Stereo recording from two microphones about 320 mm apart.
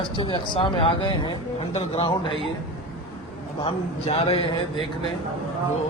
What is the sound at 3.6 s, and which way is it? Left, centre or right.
Speech, centre.